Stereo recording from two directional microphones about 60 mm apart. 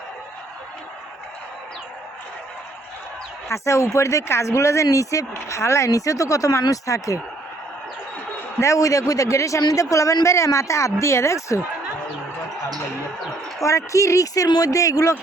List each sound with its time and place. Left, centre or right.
3.5 s a man's voice: left
5.3 s a man's voice: left
8.6 s a man's voice: left
13.6 s a man's voice: left